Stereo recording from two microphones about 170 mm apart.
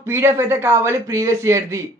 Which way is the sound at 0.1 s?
15° right (ahead or behind).